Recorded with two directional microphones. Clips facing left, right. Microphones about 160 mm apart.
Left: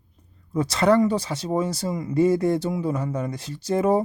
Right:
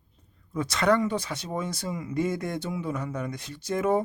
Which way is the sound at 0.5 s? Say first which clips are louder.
Left 5 dB; 30° left (ahead or behind).